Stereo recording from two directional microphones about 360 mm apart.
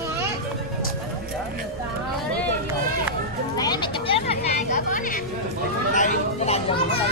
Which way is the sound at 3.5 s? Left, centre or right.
Centre.